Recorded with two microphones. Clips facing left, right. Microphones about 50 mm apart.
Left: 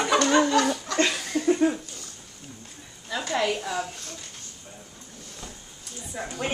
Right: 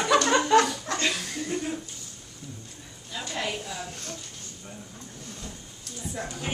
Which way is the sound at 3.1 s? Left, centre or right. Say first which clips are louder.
Left 7 dB; left.